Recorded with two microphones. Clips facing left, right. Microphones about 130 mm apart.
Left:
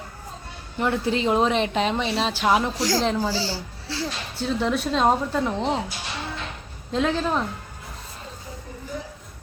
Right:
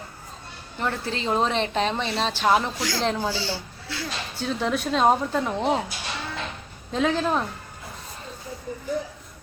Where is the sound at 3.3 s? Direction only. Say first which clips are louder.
Left 2 dB; 35° left (ahead or behind).